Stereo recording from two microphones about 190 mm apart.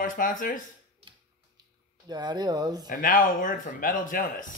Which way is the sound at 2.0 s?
20° right (ahead or behind).